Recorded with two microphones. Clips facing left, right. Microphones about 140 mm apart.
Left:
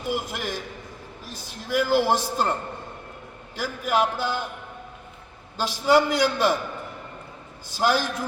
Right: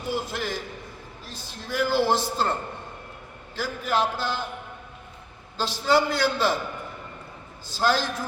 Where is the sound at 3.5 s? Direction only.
15° left (ahead or behind).